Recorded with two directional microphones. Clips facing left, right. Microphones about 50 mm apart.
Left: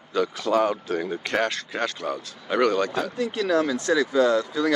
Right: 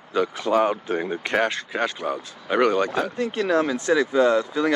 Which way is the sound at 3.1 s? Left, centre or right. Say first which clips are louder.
Even; right.